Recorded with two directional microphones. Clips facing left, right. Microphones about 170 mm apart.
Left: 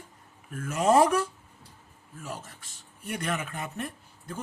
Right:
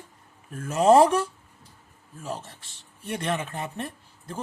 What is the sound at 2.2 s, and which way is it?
Speech, 30° right (ahead or behind).